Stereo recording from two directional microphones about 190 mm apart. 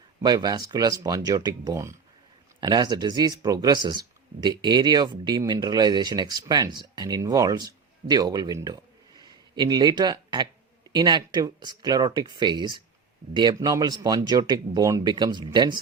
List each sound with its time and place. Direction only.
0.2 s speech: 20° right (ahead or behind)